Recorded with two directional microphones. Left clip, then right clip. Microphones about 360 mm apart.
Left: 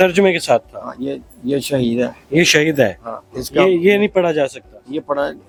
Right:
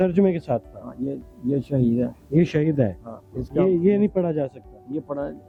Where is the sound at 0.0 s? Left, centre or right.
Centre.